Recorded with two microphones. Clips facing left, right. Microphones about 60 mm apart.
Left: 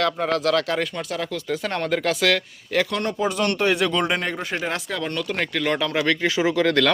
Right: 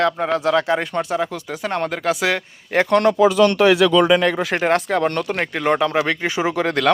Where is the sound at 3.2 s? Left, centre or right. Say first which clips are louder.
Right 5 dB; right.